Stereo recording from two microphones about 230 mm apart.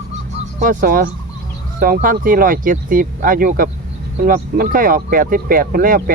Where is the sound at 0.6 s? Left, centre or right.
Right.